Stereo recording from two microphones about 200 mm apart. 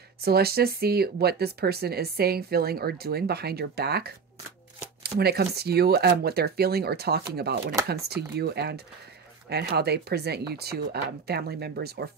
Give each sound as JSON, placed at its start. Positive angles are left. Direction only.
{"t": 0.2, "sound": "speech", "side_deg": -50}
{"t": 5.2, "sound": "speech", "side_deg": -55}